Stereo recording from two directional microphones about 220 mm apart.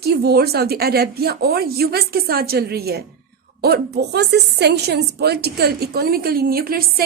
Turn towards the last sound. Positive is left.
turn(degrees=-40)  # may be behind; listen again after turning